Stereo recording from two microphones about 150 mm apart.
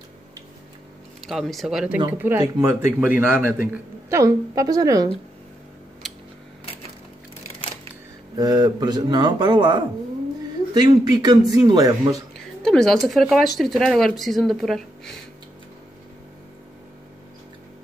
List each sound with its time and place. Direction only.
1.2 s speech: centre (ahead or behind)
2.0 s a woman's voice: 15° right (ahead or behind)
8.4 s a woman's voice: 25° right (ahead or behind)
12.6 s speech: 5° left (ahead or behind)